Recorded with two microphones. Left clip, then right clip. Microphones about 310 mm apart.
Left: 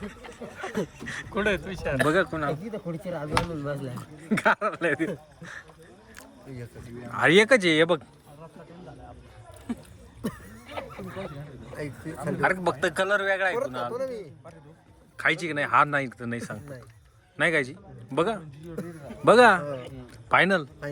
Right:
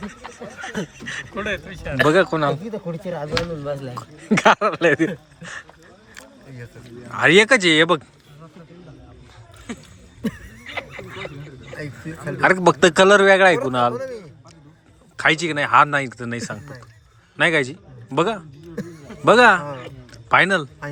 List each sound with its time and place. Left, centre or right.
0.8 s speech: centre
1.6 s speech: left
2.0 s speech: centre
7.1 s speech: centre
11.8 s speech: centre
13.9 s speech: centre
15.1 s a man's voice: centre